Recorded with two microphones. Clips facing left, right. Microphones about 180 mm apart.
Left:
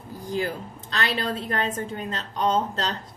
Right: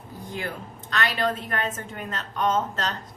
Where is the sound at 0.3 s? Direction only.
35° left (ahead or behind).